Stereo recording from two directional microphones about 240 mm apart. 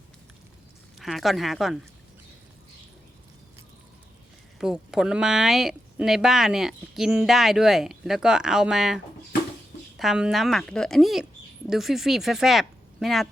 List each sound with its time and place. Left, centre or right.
0.9 s speech: centre
4.5 s speech: centre
10.0 s speech: centre